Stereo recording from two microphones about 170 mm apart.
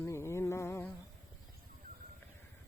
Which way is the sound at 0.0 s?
15° left (ahead or behind).